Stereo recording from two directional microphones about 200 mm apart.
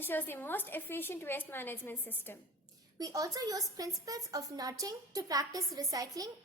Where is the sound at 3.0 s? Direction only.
20° right (ahead or behind).